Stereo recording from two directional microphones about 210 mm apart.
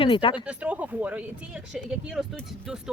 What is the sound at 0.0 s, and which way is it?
Speech, 25° left (ahead or behind).